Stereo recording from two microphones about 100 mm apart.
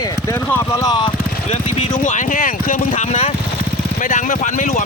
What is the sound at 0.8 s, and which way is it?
Vehicle, 40° left (ahead or behind).